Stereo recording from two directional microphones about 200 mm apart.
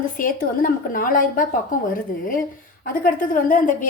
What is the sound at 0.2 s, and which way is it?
A woman's voice, 45° left (ahead or behind).